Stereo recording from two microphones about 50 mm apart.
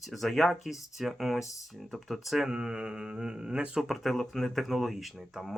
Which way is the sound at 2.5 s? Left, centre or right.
Centre.